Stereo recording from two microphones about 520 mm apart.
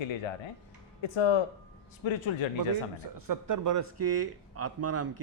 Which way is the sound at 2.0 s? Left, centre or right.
Left.